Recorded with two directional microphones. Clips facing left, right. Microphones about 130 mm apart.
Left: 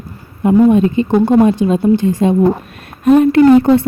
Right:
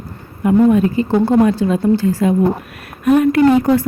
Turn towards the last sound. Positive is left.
turn(degrees=25)  # may be behind; listen again after turning